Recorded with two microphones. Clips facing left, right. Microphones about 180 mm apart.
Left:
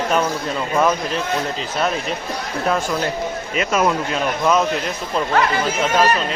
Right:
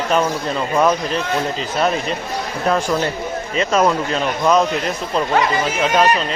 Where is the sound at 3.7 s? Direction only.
5° left (ahead or behind).